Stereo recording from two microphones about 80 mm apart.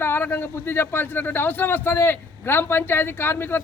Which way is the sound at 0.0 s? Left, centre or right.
Left.